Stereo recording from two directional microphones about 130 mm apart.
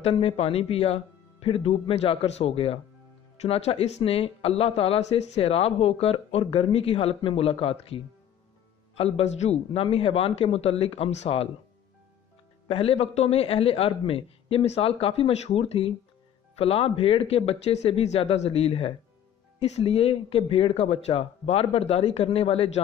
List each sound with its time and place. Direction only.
0.0 s speech: 50° left (ahead or behind)
12.6 s speech: 50° left (ahead or behind)